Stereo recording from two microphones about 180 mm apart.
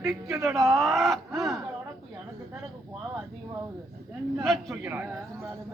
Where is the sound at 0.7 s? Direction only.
Centre (ahead or behind).